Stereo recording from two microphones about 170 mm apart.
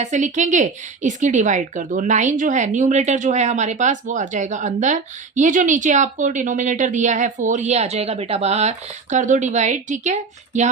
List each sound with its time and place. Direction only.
0.0 s speech: 45° right (ahead or behind)